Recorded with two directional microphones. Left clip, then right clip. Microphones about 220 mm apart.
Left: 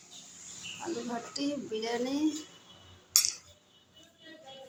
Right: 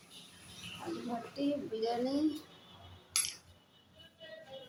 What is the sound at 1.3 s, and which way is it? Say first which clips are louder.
Speech: even; 15° left (ahead or behind).